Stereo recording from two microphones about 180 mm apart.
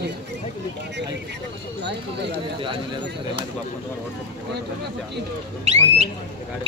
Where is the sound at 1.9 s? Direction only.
70° right (ahead or behind).